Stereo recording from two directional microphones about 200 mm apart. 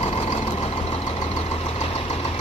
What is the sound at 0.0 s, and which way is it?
Vehicle, 30° left (ahead or behind).